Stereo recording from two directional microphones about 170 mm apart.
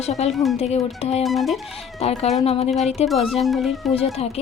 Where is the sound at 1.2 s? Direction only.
Centre (ahead or behind).